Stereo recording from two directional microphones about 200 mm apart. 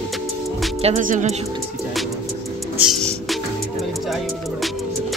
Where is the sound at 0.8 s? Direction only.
40° right (ahead or behind).